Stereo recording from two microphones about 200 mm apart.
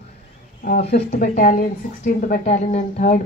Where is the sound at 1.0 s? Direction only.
45° left (ahead or behind).